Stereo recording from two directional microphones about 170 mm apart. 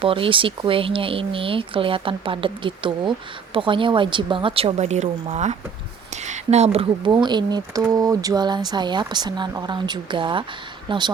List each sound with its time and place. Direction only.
0.0 s speech: 30° right (ahead or behind)